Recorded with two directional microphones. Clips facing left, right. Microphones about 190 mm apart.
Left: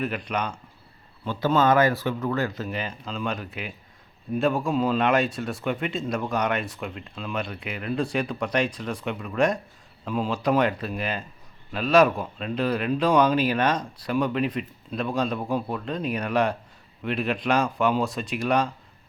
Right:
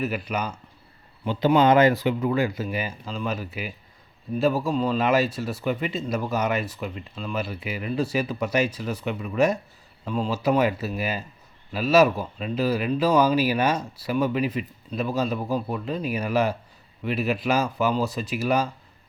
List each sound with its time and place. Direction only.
0.0 s speech: 5° right (ahead or behind)
1.2 s speech: 15° right (ahead or behind)